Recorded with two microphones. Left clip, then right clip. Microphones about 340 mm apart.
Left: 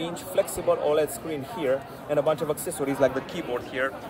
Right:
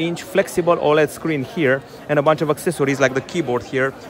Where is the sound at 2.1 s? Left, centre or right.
Right.